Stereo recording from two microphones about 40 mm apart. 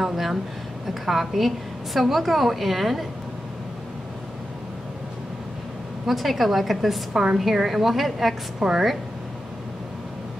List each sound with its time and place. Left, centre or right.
0.0 s a woman's voice: centre
6.0 s a woman's voice: centre
8.5 s speech: centre